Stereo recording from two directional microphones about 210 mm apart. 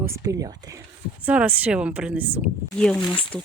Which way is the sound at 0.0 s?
15° right (ahead or behind).